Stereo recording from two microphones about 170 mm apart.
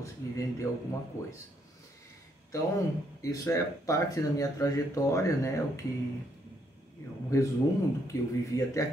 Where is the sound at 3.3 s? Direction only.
20° left (ahead or behind).